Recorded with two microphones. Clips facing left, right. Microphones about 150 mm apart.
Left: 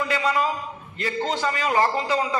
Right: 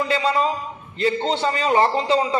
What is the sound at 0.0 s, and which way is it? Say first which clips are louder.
A man's voice: right 3 dB; 25° right (ahead or behind).